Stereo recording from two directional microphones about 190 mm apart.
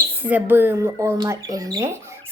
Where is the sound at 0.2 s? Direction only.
10° right (ahead or behind).